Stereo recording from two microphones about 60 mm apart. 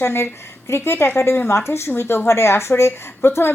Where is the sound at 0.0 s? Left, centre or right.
Left.